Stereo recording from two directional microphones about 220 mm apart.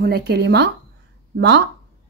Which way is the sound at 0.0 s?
45° right (ahead or behind).